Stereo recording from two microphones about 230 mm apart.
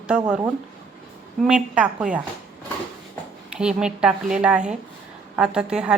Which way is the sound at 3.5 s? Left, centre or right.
Centre.